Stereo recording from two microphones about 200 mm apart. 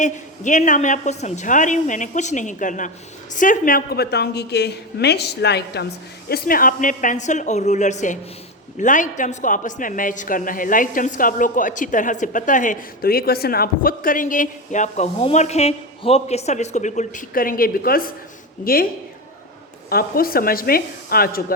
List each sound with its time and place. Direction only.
0.0 s a woman's voice: 40° left (ahead or behind)
19.9 s a woman's voice: 50° left (ahead or behind)